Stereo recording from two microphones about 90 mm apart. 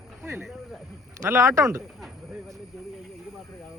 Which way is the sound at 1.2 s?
30° right (ahead or behind).